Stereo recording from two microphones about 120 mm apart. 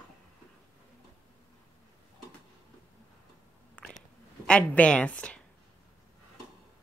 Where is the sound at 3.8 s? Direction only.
10° left (ahead or behind).